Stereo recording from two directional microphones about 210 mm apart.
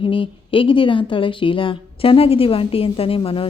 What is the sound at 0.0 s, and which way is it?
A woman's voice, 25° left (ahead or behind).